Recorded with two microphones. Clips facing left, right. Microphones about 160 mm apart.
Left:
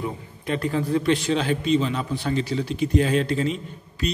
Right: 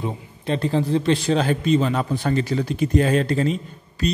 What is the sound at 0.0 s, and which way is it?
A man's voice, 30° right (ahead or behind).